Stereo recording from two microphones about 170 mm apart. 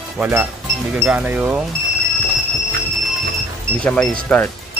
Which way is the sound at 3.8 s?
5° left (ahead or behind).